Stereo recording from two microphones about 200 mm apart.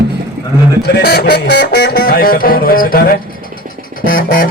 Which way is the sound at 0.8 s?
50° left (ahead or behind).